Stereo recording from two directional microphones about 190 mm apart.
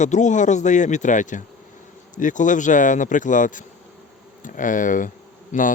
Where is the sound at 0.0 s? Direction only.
40° left (ahead or behind).